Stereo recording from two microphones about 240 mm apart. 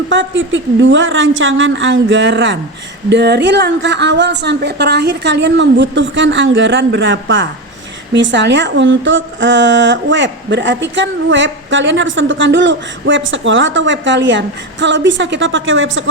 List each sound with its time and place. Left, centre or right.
0.1 s speech: right